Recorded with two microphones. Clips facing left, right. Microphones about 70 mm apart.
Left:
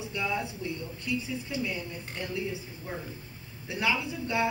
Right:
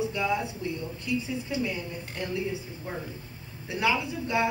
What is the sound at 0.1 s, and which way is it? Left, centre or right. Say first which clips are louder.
Speech: right 3 dB; right.